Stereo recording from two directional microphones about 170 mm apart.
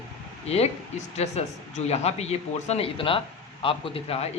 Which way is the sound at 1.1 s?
40° left (ahead or behind).